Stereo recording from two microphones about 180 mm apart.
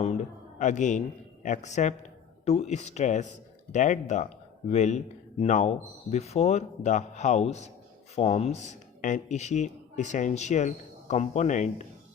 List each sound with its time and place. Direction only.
0.6 s a man's voice: 45° left (ahead or behind)